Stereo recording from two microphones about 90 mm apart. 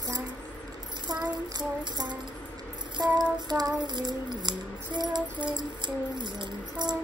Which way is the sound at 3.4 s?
45° right (ahead or behind).